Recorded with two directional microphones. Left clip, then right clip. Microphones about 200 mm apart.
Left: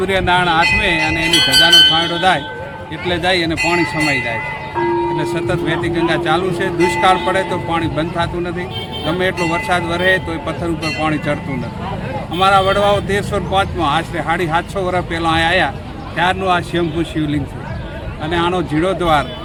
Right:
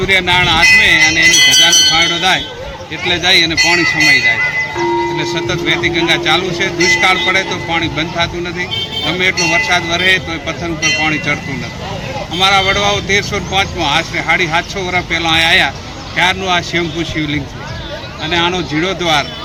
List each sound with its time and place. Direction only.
0.1 s speech: 15° left (ahead or behind)
12.4 s speech: 15° left (ahead or behind)